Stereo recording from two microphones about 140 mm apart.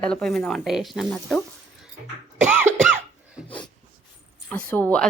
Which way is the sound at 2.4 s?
10° right (ahead or behind).